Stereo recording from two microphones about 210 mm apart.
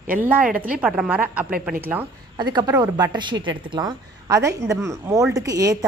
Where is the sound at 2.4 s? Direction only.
20° right (ahead or behind).